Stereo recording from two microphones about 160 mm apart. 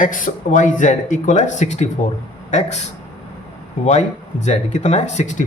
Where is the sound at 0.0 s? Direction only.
55° left (ahead or behind).